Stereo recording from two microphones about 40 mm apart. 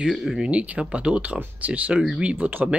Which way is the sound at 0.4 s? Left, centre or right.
Right.